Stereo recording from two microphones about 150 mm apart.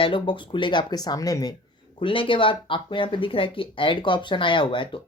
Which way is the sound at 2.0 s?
35° left (ahead or behind).